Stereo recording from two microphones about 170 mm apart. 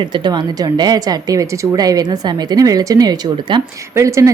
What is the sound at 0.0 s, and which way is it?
A woman's voice, 25° right (ahead or behind).